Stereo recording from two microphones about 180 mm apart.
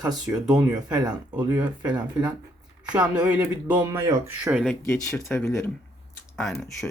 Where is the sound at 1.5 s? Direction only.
10° right (ahead or behind).